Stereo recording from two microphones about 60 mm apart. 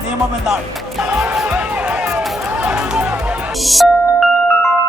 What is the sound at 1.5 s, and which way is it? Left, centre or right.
Music, right.